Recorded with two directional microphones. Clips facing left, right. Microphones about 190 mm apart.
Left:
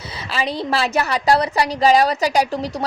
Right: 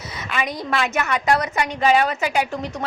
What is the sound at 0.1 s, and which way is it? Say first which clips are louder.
A woman's voice: left 2 dB; 30° left (ahead or behind).